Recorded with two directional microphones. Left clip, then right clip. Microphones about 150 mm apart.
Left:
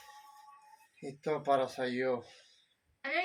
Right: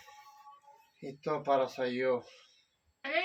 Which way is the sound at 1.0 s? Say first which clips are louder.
Even; 15° right (ahead or behind).